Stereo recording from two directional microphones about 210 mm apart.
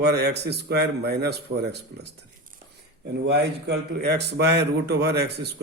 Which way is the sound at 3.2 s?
50° right (ahead or behind).